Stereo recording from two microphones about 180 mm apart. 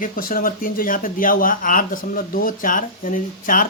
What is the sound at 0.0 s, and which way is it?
Speech, 50° left (ahead or behind).